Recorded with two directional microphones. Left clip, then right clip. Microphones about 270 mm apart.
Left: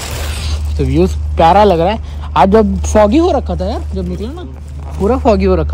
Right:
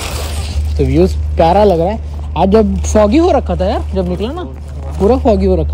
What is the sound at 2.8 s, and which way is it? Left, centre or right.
Speech, centre.